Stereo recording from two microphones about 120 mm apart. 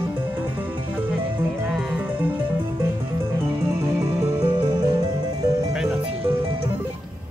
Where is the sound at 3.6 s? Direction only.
20° right (ahead or behind).